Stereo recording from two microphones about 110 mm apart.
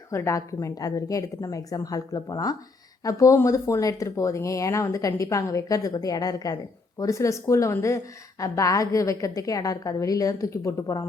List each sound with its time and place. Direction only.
0.1 s a woman's voice: 25° left (ahead or behind)